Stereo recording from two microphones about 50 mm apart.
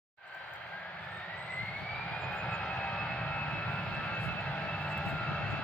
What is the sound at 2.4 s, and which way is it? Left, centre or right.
Vehicle, left.